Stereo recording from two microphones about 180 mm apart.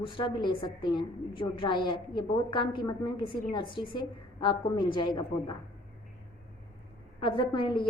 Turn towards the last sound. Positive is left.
turn(degrees=25)  # may be behind; listen again after turning